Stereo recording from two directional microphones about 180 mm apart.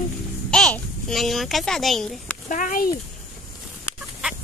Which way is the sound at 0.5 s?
5° left (ahead or behind).